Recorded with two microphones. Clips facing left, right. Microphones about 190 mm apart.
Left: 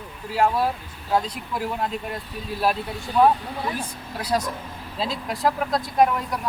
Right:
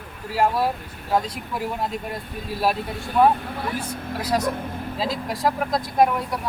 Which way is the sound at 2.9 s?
55° right (ahead or behind).